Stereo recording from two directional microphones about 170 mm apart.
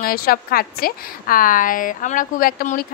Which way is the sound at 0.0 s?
60° left (ahead or behind).